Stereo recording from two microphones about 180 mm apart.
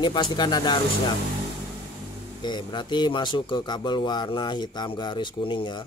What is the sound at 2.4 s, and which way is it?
Speech, 25° left (ahead or behind).